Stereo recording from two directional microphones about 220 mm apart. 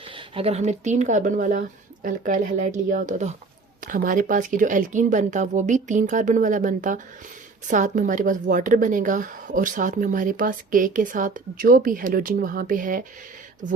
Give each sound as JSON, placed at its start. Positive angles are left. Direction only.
{"t": 0.3, "sound": "a woman's voice", "side_deg": -30}